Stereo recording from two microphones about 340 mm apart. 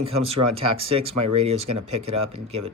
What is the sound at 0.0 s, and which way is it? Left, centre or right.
Speech, centre.